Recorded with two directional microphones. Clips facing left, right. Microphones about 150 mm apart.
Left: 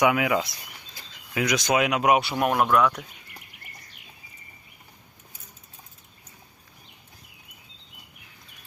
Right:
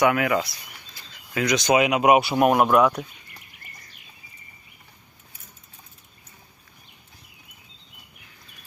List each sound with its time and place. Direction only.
0.0 s speech: 15° left (ahead or behind); by 3.0 s 25° right (ahead or behind)